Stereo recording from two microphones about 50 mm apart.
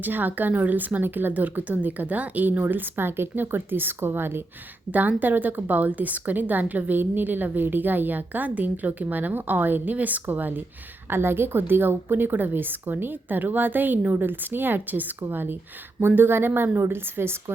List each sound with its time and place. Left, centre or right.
0.0 s a woman's voice: right
4.9 s a woman's voice: right
11.1 s a woman's voice: right